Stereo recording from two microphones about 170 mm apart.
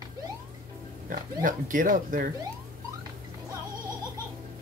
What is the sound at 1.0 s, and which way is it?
Speech, 50° right (ahead or behind).